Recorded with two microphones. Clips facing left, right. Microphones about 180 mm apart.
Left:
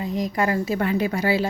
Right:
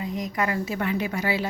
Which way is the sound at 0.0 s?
30° left (ahead or behind).